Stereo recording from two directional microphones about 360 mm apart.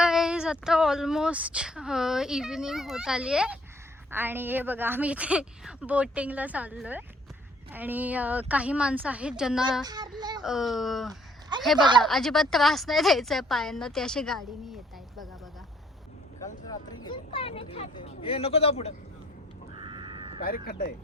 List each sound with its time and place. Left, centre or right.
0.0 s speech: centre
11.1 s a sound: centre
12.0 s speech: centre
16.6 s speech: centre
19.7 s a sound: centre
20.4 s speech: left